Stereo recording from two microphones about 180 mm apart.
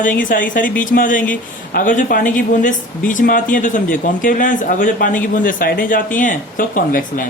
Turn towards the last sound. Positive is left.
turn(degrees=50)  # may be behind; listen again after turning